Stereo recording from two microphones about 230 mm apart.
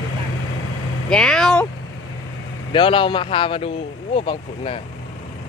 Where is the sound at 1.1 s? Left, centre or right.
Centre.